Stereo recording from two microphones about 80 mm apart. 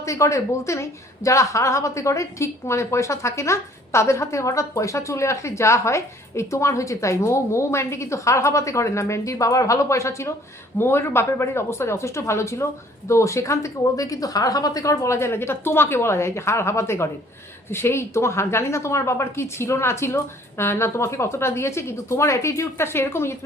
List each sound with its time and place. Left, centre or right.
0.0 s a woman's voice: left